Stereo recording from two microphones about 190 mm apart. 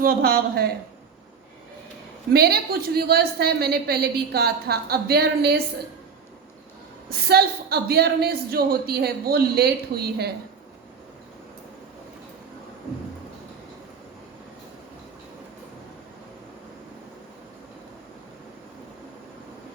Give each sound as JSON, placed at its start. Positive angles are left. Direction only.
{"t": 0.0, "sound": "a woman's voice", "side_deg": -55}
{"t": 2.3, "sound": "a woman's voice", "side_deg": -55}
{"t": 7.1, "sound": "a woman's voice", "side_deg": -55}